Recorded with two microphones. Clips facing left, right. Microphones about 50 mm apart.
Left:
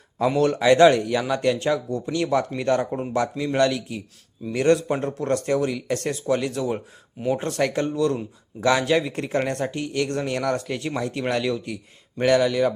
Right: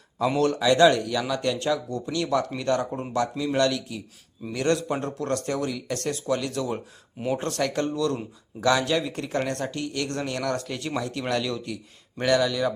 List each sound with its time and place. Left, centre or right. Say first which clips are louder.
0.3 s speech: left 4 dB; left